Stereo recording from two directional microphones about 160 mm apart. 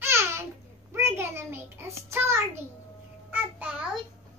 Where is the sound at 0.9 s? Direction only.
15° right (ahead or behind).